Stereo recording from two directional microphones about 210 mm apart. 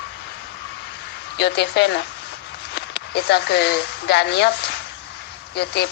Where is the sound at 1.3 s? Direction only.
55° left (ahead or behind).